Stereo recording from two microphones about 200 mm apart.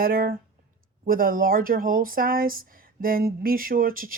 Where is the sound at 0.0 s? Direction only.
45° right (ahead or behind).